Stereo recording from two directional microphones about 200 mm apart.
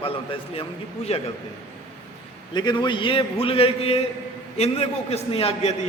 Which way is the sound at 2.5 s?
20° left (ahead or behind).